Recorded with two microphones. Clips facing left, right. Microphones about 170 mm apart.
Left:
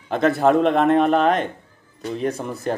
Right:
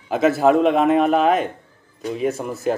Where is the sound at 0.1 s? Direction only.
5° right (ahead or behind).